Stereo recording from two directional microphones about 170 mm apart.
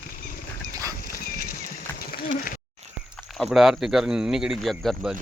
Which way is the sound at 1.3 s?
60° left (ahead or behind).